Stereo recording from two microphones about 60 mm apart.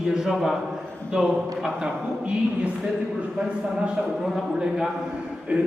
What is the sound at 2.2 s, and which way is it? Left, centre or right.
Speech, right.